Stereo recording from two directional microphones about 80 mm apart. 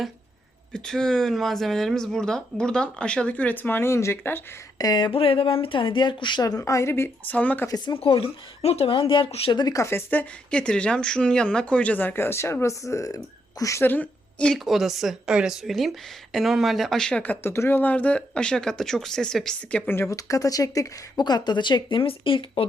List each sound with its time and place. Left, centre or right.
0.7 s speech: centre; by 4.4 s left
4.8 s speech: left
6.4 s a woman's voice: left
7.3 s speech: centre
7.9 s speech: left
9.0 s speech: left
9.7 s a woman's voice: left
10.1 s speech: centre; by 13.8 s left
13.8 s a woman's voice: left
14.5 s speech: centre
17.1 s speech: centre
17.4 s speech: left; by 19.9 s centre
20.1 s speech: left
21.2 s speech: left